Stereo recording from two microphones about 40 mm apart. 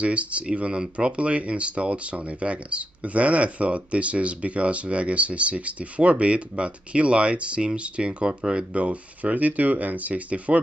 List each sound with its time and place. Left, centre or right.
0.0 s speech: right
8.8 s speech: right